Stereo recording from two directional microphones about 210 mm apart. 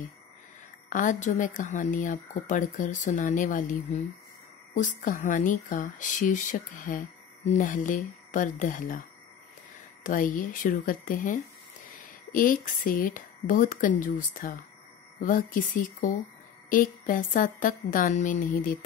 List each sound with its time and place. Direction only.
0.8 s speech: 40° left (ahead or behind)
10.0 s speech: 40° left (ahead or behind)